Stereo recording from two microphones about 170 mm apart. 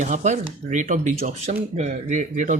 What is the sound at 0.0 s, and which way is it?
Speech, 45° right (ahead or behind).